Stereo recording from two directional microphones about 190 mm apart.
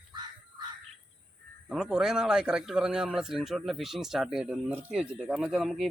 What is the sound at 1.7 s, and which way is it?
Speech, 5° right (ahead or behind).